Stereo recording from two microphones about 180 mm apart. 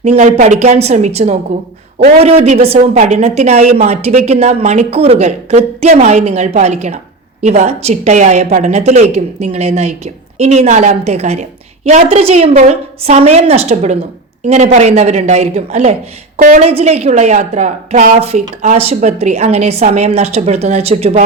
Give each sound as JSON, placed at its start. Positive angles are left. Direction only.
{"t": 0.0, "sound": "speech", "side_deg": -40}